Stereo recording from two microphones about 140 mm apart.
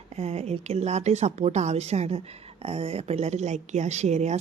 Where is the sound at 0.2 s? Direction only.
50° right (ahead or behind).